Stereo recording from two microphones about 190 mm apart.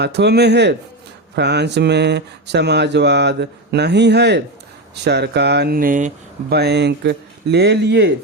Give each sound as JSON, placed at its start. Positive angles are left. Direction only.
{"t": 0.0, "sound": "speech", "side_deg": -60}
{"t": 6.5, "sound": "speech", "side_deg": -60}